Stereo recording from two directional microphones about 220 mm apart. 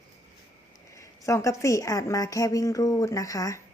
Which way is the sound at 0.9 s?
15° left (ahead or behind).